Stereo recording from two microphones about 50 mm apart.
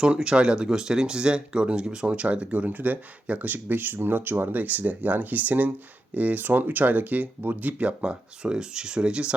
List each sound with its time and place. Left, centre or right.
0.2 s speech: centre